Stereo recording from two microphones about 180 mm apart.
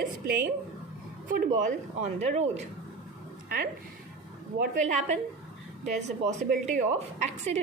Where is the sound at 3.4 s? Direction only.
55° right (ahead or behind).